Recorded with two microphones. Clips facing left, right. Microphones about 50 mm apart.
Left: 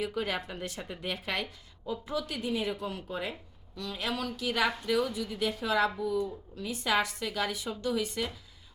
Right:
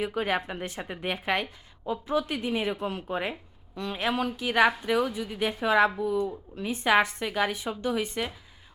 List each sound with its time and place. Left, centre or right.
0.0 s a woman's voice: right